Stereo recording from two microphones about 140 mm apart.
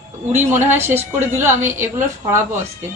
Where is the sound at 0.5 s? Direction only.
15° right (ahead or behind).